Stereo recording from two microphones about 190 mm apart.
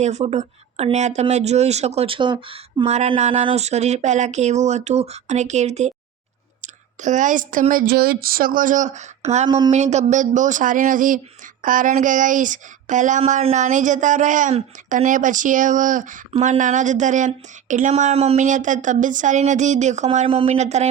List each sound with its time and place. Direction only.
0.0 s speech: 35° right (ahead or behind)